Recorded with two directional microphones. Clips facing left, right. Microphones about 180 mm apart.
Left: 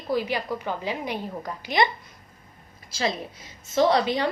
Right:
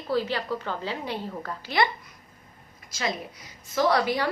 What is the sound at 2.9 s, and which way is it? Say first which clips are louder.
A woman's voice: left 3 dB; 30° left (ahead or behind).